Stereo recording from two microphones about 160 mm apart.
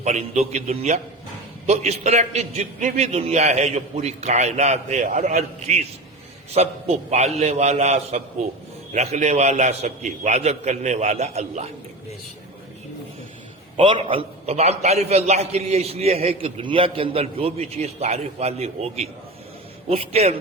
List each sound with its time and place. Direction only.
0.0 s a man's voice: 45° right (ahead or behind)
13.7 s a man's voice: 35° right (ahead or behind)
19.9 s a man's voice: 40° right (ahead or behind)